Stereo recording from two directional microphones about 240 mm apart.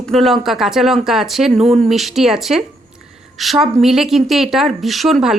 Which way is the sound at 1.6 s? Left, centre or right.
Right.